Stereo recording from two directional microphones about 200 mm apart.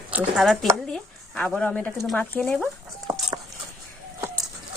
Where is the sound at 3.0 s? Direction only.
20° right (ahead or behind).